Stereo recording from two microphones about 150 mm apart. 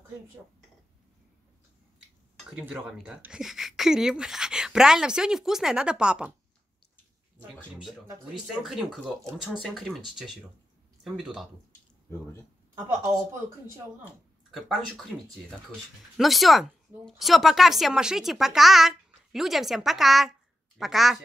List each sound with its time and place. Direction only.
2.5 s speech: 10° right (ahead or behind)
8.6 s speech: 5° right (ahead or behind)
12.7 s a woman's voice: 15° right (ahead or behind)
14.5 s speech: centre (ahead or behind)
16.2 s speech: centre (ahead or behind)